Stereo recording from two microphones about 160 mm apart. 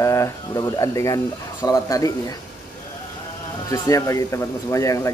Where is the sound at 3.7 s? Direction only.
20° left (ahead or behind).